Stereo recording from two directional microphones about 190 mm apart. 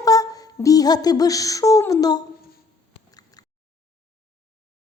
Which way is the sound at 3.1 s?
20° left (ahead or behind).